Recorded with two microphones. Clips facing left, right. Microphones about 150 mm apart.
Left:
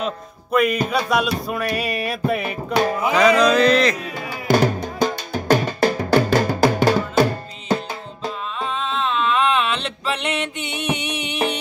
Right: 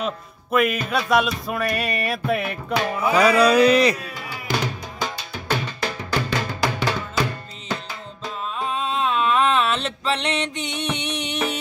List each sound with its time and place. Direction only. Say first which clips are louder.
0.0 s speech: left 1 dB; 5° right (ahead or behind)
3.1 s mantra: even; 10° right (ahead or behind)
4.5 s drum: left 9 dB; 45° left (ahead or behind)
8.5 s music: right 2 dB; 5° right (ahead or behind)